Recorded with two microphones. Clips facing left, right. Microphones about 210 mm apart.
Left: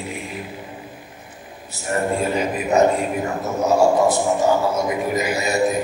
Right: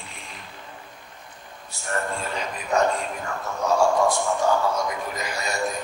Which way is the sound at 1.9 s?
15° left (ahead or behind).